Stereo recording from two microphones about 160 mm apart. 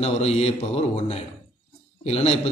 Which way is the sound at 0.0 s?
40° left (ahead or behind).